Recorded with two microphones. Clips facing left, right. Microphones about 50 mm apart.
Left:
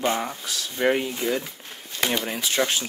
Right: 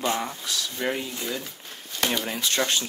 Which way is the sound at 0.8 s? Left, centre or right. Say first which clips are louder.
Left 9 dB; left.